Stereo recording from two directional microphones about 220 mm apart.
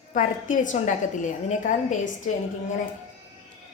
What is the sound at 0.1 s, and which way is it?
A woman's voice, 35° left (ahead or behind).